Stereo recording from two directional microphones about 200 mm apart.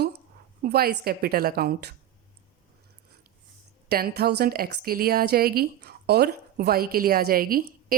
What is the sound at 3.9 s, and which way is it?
A woman's voice, 50° right (ahead or behind).